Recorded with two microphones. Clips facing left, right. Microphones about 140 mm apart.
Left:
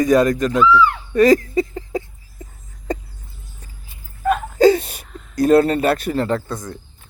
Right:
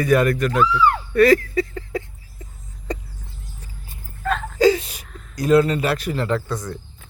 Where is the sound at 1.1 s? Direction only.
20° left (ahead or behind).